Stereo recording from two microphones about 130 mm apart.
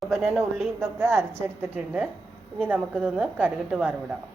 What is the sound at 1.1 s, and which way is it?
A woman's voice, 20° right (ahead or behind).